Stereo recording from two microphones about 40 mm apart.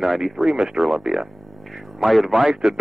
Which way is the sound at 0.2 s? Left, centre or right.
Centre.